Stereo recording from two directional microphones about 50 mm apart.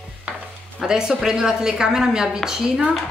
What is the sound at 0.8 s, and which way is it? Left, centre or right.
A woman's voice, centre.